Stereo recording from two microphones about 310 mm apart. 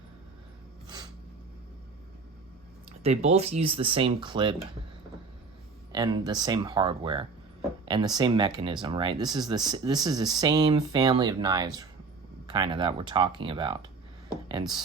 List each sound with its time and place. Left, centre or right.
3.0 s speech: right
5.9 s speech: centre